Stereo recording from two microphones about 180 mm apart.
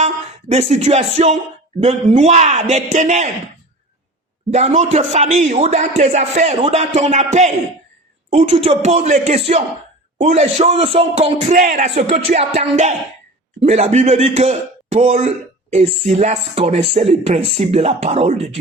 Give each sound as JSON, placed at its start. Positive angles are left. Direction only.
{"t": 0.0, "sound": "speech", "side_deg": -35}
{"t": 4.5, "sound": "speech", "side_deg": -40}